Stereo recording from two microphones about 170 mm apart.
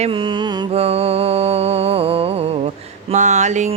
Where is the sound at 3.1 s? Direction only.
45° right (ahead or behind).